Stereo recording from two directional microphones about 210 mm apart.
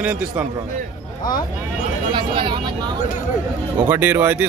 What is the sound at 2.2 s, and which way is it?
Speech, 25° right (ahead or behind).